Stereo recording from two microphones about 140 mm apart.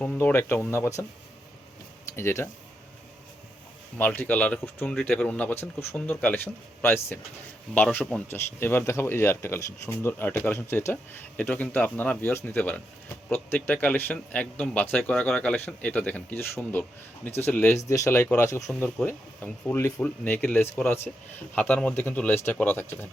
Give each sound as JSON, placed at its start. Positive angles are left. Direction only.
{"t": 0.0, "sound": "speech", "side_deg": 10}
{"t": 2.1, "sound": "speech", "side_deg": 15}
{"t": 3.9, "sound": "speech", "side_deg": 15}
{"t": 18.7, "sound": "speech", "side_deg": 5}